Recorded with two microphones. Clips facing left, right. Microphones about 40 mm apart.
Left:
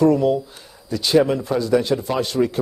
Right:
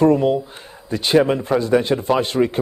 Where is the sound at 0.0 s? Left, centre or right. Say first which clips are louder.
Right 1 dB; right.